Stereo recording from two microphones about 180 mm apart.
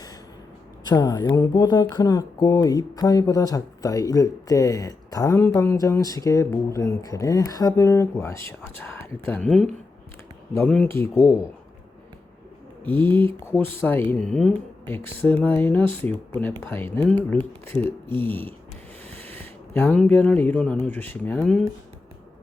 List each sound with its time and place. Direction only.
0.9 s speech: 20° left (ahead or behind)
10.5 s speech: 10° left (ahead or behind)
12.8 s speech: 10° left (ahead or behind)